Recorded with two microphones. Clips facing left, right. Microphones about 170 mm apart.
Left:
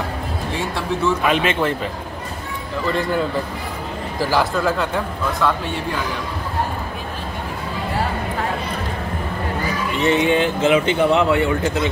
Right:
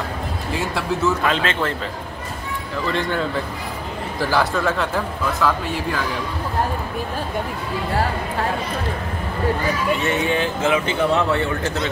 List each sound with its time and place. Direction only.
1.2 s speech: 15° left (ahead or behind)
2.9 s speech: 5° left (ahead or behind)
10.0 s speech: 20° left (ahead or behind)